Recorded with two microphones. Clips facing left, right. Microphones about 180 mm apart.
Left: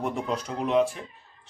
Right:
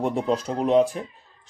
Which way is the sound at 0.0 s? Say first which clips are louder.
Right 5 dB; 35° right (ahead or behind).